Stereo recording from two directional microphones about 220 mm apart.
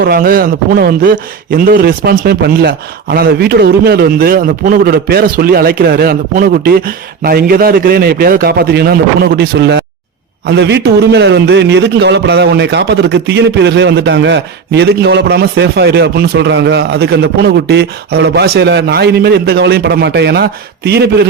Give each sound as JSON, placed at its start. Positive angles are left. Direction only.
{"t": 0.0, "sound": "a man's voice", "side_deg": -45}